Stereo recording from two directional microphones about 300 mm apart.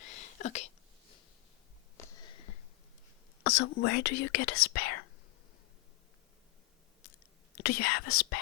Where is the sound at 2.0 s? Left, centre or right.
Centre.